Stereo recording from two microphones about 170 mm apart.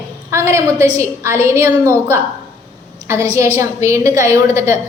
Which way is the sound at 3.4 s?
15° right (ahead or behind).